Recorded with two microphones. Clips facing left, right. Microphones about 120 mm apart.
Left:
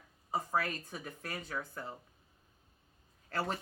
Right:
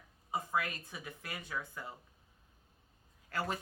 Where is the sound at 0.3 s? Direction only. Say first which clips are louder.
Left 2 dB; 35° left (ahead or behind).